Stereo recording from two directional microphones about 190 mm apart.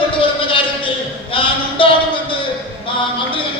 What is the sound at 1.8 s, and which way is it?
Music, 25° left (ahead or behind).